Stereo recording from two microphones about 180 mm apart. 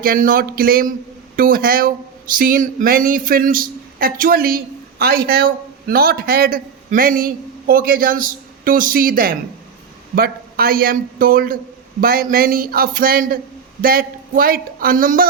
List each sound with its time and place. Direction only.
0.0 s speech: 50° right (ahead or behind)